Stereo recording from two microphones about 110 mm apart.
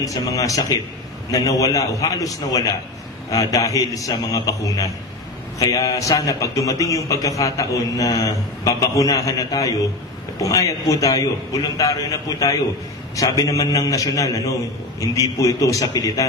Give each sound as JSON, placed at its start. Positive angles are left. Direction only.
{"t": 0.0, "sound": "a man's voice", "side_deg": 30}